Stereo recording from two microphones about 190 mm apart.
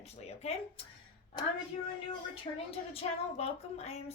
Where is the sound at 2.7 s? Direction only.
30° left (ahead or behind).